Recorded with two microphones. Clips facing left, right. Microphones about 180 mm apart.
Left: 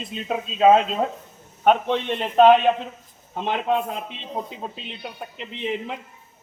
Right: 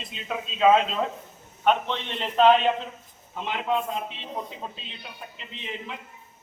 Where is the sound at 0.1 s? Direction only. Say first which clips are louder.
Left 5 dB; 45° left (ahead or behind).